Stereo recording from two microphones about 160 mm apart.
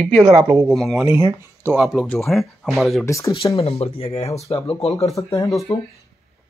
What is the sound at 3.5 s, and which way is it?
Speech, 40° left (ahead or behind).